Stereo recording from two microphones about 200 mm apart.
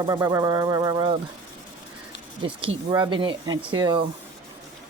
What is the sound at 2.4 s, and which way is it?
Speech, 25° right (ahead or behind).